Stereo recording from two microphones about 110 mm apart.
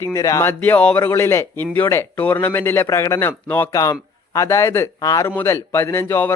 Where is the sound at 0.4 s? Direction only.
15° left (ahead or behind).